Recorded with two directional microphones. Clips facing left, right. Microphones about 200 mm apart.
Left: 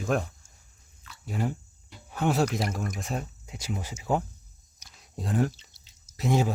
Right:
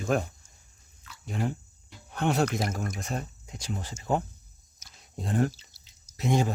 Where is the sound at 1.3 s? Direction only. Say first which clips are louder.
Left 1 dB; 5° left (ahead or behind).